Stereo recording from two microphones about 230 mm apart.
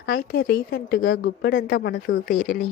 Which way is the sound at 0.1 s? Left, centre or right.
Left.